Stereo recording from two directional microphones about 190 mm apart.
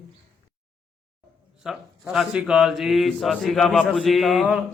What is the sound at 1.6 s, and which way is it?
A man's voice, centre (ahead or behind).